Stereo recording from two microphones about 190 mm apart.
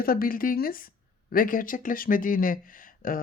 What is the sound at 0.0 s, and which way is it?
Speech, 50° left (ahead or behind).